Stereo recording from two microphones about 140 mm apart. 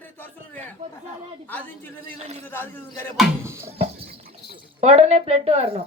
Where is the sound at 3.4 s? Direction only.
15° right (ahead or behind).